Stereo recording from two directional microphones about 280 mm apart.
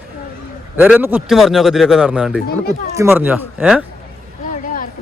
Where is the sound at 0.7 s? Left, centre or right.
Centre.